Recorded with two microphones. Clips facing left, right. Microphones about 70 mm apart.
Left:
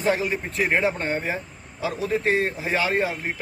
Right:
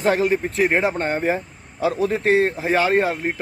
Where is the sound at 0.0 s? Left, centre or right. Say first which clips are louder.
Right 4 dB; right.